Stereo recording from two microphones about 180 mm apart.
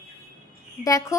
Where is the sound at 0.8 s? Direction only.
45° left (ahead or behind).